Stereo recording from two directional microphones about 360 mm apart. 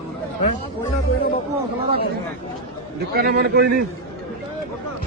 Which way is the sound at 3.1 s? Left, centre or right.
Right.